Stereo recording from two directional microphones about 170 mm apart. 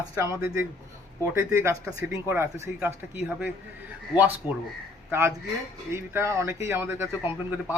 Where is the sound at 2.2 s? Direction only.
15° right (ahead or behind).